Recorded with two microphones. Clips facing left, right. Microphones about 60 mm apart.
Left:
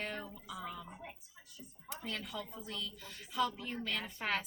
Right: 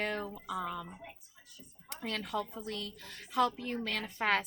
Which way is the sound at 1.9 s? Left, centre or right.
Right.